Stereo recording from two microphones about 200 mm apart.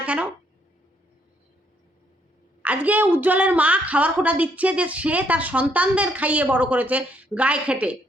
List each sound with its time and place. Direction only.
0.0 s speech: 5° right (ahead or behind)
2.6 s a woman's voice: 10° right (ahead or behind)